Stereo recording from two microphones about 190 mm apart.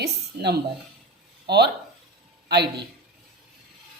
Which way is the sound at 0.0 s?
60° right (ahead or behind).